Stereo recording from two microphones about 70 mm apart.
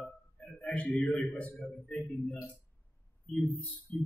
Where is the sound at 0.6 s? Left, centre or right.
Centre.